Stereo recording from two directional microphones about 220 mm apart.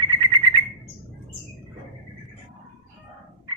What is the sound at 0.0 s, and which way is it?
Bird, 20° right (ahead or behind).